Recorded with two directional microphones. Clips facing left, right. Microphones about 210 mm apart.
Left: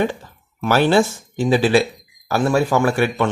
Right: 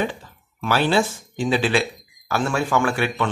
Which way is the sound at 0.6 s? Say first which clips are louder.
Left 5 dB; 45° left (ahead or behind).